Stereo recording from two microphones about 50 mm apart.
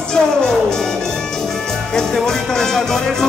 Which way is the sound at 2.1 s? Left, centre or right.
Centre.